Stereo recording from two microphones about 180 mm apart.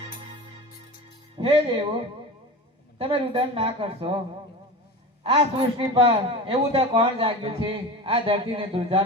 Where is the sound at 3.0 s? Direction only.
30° right (ahead or behind).